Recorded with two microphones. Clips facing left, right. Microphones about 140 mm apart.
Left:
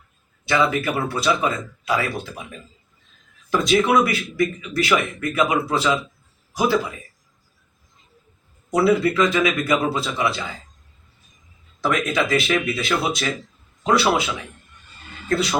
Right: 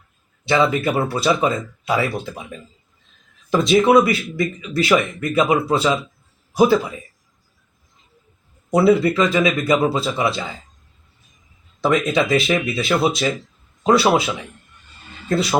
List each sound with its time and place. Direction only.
0.4 s speech: 25° right (ahead or behind)
3.5 s speech: 25° right (ahead or behind)
8.7 s speech: 25° right (ahead or behind)
11.8 s speech: 25° right (ahead or behind)